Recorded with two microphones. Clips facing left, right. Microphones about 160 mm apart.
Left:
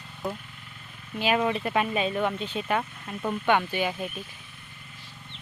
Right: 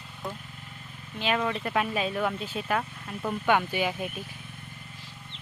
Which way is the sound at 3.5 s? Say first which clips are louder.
Even; 5° right (ahead or behind).